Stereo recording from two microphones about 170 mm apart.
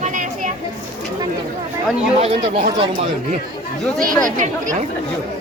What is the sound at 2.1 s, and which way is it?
Speech, 35° right (ahead or behind).